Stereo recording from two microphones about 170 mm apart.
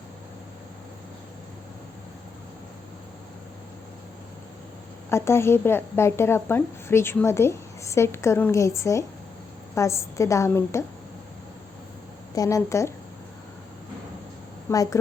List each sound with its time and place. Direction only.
5.0 s a woman's voice: 15° left (ahead or behind)
12.3 s a woman's voice: 20° left (ahead or behind)
14.7 s a woman's voice: 20° left (ahead or behind)